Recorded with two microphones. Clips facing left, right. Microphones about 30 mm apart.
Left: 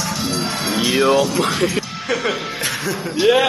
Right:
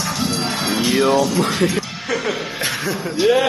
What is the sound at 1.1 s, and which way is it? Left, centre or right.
Speech, left.